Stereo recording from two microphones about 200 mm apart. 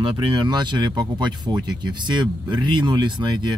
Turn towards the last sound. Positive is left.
turn(degrees=-20)  # may be behind; listen again after turning